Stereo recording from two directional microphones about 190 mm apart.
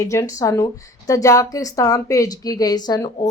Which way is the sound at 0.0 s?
15° left (ahead or behind).